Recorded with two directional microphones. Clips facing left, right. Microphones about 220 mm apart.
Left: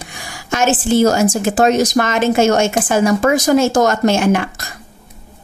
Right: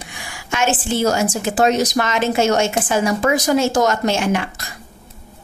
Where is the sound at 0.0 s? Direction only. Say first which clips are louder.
Left 2 dB; 40° left (ahead or behind).